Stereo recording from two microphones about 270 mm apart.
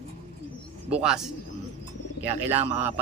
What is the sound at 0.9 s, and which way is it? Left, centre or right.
Speech, centre.